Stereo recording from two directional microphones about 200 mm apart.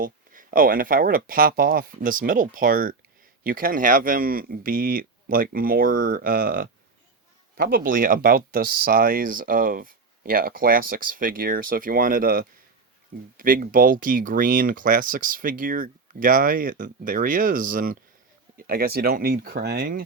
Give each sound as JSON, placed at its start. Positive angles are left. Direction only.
{"t": 0.0, "sound": "speech", "side_deg": -45}